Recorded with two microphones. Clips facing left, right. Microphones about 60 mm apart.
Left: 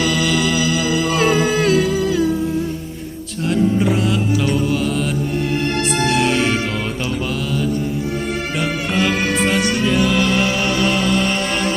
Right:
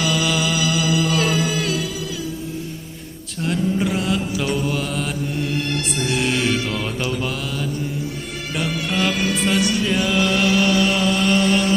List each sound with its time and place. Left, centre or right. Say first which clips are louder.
0.2 s music: left 3 dB; centre
0.6 s music: left 2 dB; left
3.4 s music: left 4 dB; centre
3.9 s mantra: left 4 dB; centre
6.0 s music: left 4 dB; left
9.2 s music: left 3 dB; left
9.6 s music: left 2 dB; left
9.8 s music: left 3 dB; centre
10.2 s a sound: even; left
11.3 s chainsaw: right 2 dB; left